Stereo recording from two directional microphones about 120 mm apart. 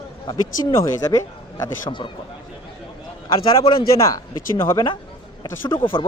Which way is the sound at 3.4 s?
50° left (ahead or behind).